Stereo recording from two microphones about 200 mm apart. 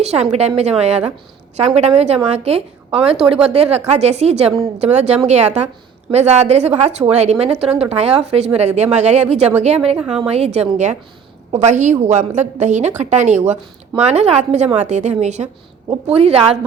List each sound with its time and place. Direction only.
0.0 s a woman's voice: 30° right (ahead or behind)